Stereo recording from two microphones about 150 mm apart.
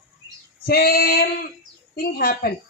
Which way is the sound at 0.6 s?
90° left.